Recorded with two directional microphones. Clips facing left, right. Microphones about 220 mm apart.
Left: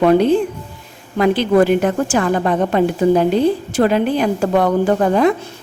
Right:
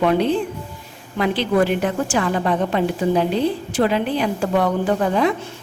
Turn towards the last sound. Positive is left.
turn(degrees=45)  # may be behind; listen again after turning